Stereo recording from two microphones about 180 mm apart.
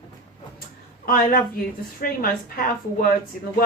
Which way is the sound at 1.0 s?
55° left (ahead or behind).